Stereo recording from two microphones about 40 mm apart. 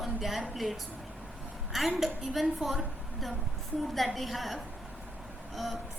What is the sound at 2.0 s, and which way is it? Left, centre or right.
Speech, centre.